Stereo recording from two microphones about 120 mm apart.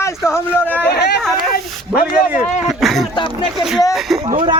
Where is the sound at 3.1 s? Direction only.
40° left (ahead or behind).